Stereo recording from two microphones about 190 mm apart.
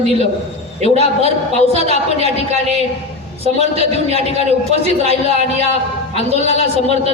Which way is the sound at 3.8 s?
35° left (ahead or behind).